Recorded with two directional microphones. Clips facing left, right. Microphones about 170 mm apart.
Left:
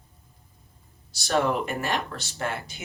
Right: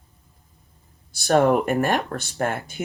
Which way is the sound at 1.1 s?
55° right (ahead or behind).